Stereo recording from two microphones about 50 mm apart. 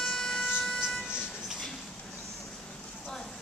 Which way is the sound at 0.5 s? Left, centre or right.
Centre.